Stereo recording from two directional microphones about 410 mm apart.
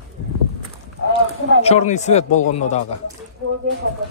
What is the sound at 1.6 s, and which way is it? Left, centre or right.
Speech, centre.